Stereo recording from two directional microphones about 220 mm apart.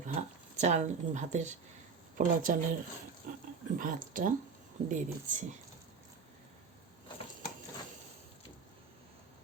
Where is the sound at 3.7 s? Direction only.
35° right (ahead or behind).